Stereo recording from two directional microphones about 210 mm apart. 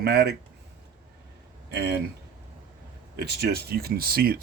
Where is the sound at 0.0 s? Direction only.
50° right (ahead or behind).